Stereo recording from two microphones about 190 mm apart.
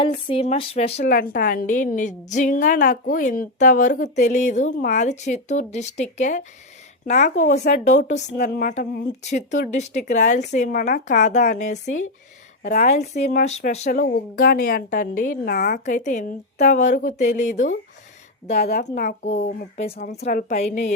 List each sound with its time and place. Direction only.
0.0 s a woman's voice: 30° left (ahead or behind)
1.1 s a woman's voice: 45° left (ahead or behind)
8.4 s speech: 55° left (ahead or behind)
8.7 s a woman's voice: 40° left (ahead or behind)